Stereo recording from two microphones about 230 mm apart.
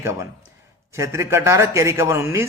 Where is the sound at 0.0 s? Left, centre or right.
Centre.